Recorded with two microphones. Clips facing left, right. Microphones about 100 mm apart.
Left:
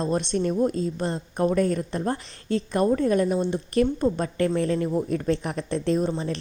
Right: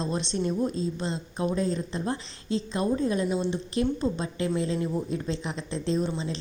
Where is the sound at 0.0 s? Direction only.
50° left (ahead or behind).